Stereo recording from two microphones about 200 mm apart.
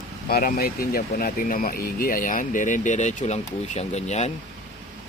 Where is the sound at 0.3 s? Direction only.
45° left (ahead or behind).